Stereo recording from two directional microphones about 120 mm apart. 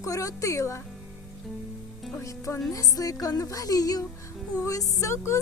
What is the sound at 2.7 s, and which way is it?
Music, 30° left (ahead or behind).